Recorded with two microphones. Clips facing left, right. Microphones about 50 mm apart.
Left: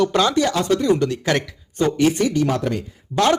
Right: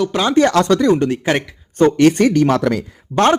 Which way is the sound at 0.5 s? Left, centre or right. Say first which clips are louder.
Right 5 dB; right.